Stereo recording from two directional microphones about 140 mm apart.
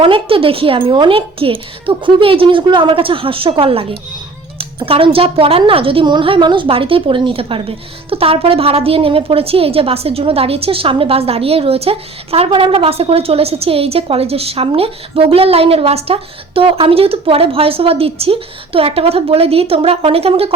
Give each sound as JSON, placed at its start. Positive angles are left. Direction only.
{"t": 0.0, "sound": "speech", "side_deg": -40}
{"t": 4.9, "sound": "a woman's voice", "side_deg": -40}